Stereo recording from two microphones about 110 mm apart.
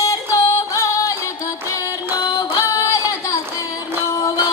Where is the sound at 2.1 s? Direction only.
40° left (ahead or behind).